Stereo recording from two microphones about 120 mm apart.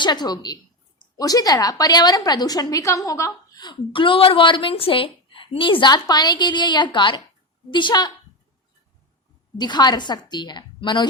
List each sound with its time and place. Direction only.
0.0 s a woman's voice: 35° left (ahead or behind)
9.6 s a woman's voice: 35° left (ahead or behind)